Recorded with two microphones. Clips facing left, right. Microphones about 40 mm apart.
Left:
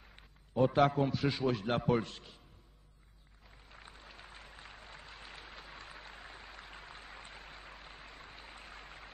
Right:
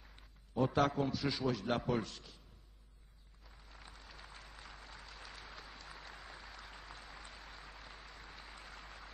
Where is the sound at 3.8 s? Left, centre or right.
Left.